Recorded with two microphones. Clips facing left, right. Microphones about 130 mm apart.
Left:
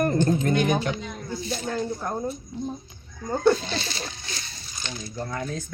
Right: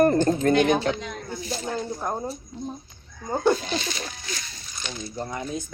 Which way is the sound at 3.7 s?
30° left (ahead or behind).